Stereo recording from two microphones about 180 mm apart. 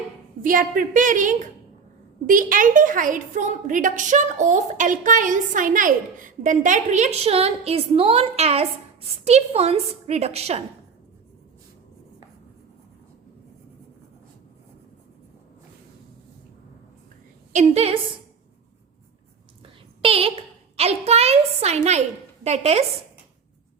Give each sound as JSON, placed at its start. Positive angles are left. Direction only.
{"t": 0.4, "sound": "a woman's voice", "side_deg": -50}
{"t": 17.5, "sound": "a woman's voice", "side_deg": -40}
{"t": 20.0, "sound": "a woman's voice", "side_deg": -30}